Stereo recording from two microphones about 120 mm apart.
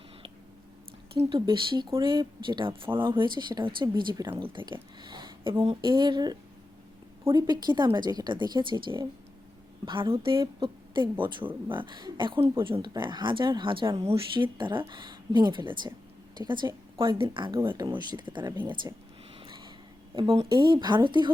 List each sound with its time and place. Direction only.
1.1 s speech: 45° right (ahead or behind)
7.3 s speech: 35° right (ahead or behind)
18.8 s speech: 30° right (ahead or behind)
19.4 s a sound: 40° right (ahead or behind)
20.1 s speech: 50° right (ahead or behind)